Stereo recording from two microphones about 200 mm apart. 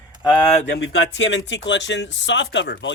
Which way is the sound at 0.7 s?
75° left (ahead or behind).